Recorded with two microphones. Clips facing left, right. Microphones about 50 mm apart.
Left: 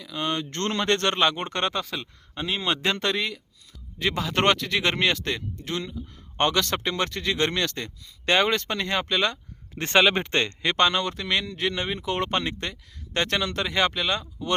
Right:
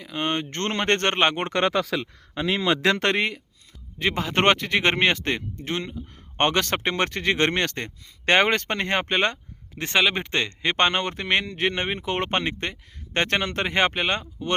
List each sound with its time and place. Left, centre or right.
0.0 s speech: right
1.5 s speech: right
2.8 s speech: right
3.2 s speech: right
3.9 s speech: right
9.7 s speech: centre
10.8 s speech: right